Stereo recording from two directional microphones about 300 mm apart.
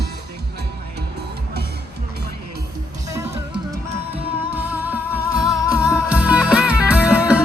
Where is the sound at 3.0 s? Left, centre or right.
Centre.